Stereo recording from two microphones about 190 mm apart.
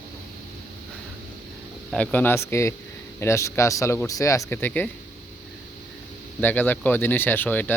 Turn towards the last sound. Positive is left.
turn(degrees=10)  # may be behind; listen again after turning